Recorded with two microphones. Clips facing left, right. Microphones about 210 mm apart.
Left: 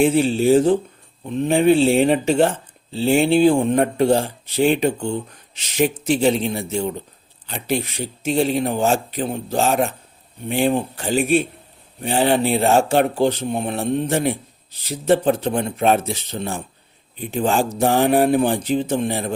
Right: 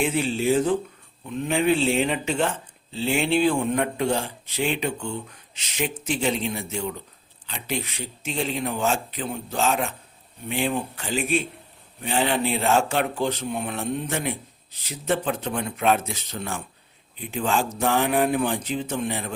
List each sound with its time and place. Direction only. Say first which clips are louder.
0.0 s speech: left 7 dB; 35° left (ahead or behind)
11.0 s a man's voice: left 7 dB; 45° left (ahead or behind)
12.0 s speech: left 6 dB; 35° left (ahead or behind)